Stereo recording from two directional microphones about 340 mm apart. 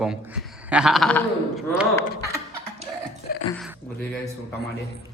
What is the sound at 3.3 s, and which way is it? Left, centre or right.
Dog, left.